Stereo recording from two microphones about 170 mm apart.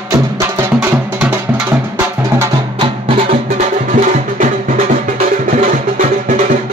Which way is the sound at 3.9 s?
50° right (ahead or behind).